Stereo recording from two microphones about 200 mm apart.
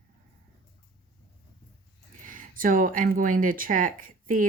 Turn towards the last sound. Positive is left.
turn(degrees=-45)  # may be behind; listen again after turning